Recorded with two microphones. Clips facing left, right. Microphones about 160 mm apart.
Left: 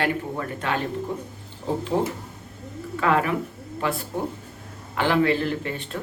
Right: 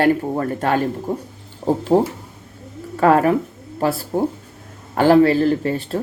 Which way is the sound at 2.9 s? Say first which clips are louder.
Right 8 dB; 40° right (ahead or behind).